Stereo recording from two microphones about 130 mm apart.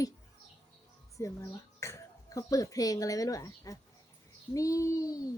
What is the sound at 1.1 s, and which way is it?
A child's voice, 25° left (ahead or behind).